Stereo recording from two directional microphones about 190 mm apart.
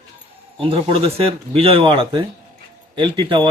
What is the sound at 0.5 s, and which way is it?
Speech, 30° right (ahead or behind).